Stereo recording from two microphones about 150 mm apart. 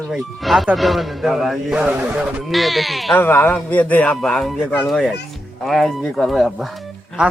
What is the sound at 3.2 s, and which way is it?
Speech, 15° left (ahead or behind).